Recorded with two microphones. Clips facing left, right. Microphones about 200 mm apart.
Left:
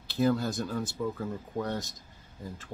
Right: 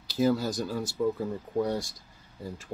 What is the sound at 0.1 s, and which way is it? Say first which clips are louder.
Speech: right 1 dB; 10° right (ahead or behind).